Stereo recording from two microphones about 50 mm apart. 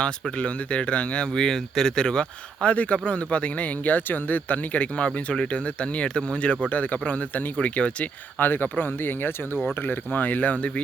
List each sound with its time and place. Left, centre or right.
0.0 s speech: left; by 1.9 s centre
2.0 s speech: centre
8.4 s speech: left